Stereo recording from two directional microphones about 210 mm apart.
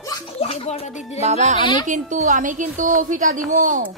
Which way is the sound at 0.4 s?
30° left (ahead or behind).